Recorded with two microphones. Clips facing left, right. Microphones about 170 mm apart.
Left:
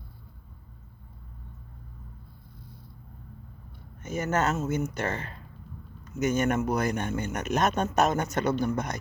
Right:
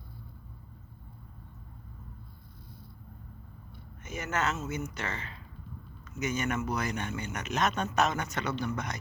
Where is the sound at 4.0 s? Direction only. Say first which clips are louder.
Left 5 dB; 45° left (ahead or behind).